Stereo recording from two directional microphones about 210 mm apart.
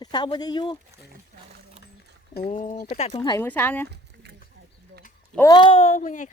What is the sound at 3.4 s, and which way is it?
Speech, 10° left (ahead or behind).